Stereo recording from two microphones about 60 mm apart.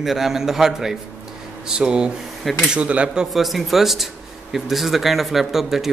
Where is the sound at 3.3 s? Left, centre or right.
Centre.